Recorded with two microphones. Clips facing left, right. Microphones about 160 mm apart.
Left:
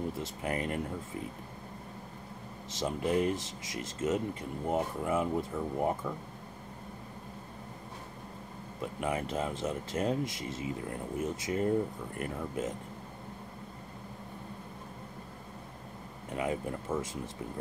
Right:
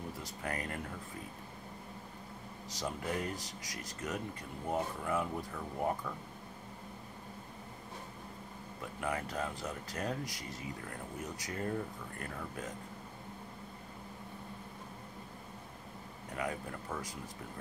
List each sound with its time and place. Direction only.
0.2 s speech: 25° left (ahead or behind)
2.7 s speech: 20° left (ahead or behind)
8.8 s speech: 20° left (ahead or behind)
16.3 s speech: 20° left (ahead or behind)